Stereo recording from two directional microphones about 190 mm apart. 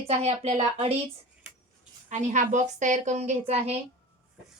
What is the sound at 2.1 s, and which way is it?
A woman's voice, 40° right (ahead or behind).